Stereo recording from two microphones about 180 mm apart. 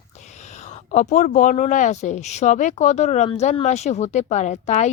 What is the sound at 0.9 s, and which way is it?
Speech, 40° left (ahead or behind).